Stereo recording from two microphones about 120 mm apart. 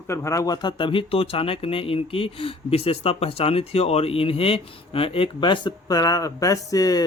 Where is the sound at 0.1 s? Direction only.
25° left (ahead or behind); by 5.7 s 40° left (ahead or behind).